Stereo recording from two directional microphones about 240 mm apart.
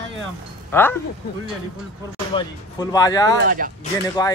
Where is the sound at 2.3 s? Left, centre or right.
Centre.